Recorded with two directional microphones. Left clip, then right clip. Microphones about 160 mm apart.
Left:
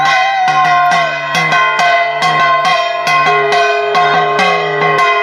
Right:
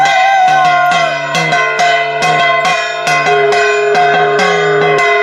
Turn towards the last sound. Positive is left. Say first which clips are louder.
# right 1 dB
turn(degrees=15)  # may be behind; listen again after turning